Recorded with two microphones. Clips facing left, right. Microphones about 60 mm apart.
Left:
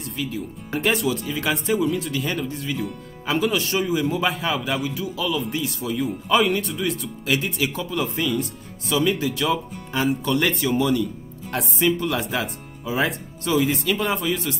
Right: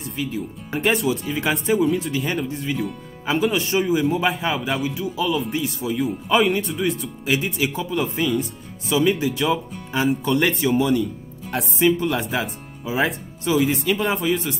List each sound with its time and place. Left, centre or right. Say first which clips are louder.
0.1 s speech: right 2 dB; centre
1.2 s speech: right 2 dB; centre
1.5 s speech: right 2 dB; centre